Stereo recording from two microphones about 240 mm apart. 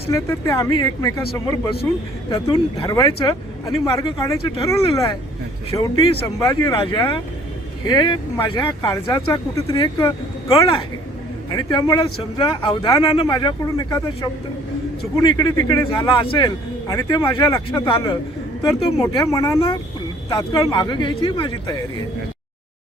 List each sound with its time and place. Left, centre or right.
0.1 s speech: centre
15.2 s speech: centre
19.5 s speech: left